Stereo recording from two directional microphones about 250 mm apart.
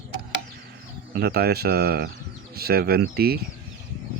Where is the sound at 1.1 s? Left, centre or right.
Right.